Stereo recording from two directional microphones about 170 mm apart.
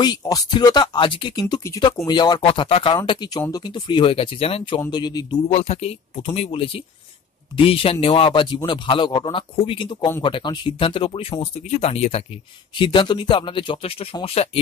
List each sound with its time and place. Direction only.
0.0 s speech: 25° left (ahead or behind)
5.5 s a man's voice: 40° left (ahead or behind)
12.7 s speech: 30° left (ahead or behind)